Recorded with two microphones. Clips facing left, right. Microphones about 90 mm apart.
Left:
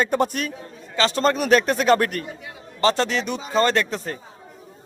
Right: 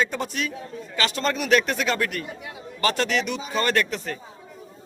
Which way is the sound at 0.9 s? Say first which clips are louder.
Left 5 dB; 35° left (ahead or behind).